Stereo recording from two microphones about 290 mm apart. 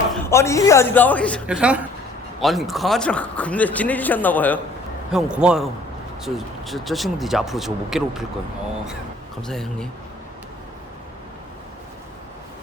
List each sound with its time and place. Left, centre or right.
0.3 s a man's voice: centre
9.5 s a man's voice: centre